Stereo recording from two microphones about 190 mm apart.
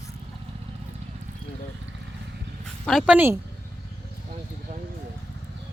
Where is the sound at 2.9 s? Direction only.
5° right (ahead or behind).